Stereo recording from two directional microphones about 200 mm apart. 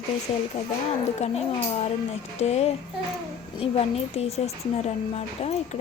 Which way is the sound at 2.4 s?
30° left (ahead or behind).